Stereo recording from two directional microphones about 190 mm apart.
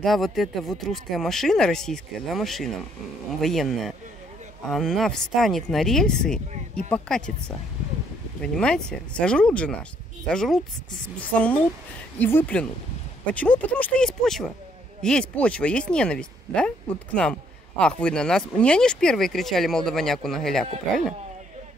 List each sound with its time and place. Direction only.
0.0 s speech: centre (ahead or behind)
6.3 s speech: 35° right (ahead or behind)
6.9 s speech: 5° left (ahead or behind)